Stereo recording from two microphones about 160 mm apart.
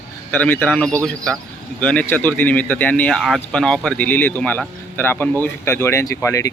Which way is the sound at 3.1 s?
Centre (ahead or behind).